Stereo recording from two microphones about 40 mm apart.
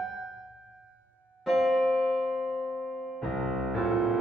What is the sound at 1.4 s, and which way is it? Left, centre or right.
Electric piano, centre.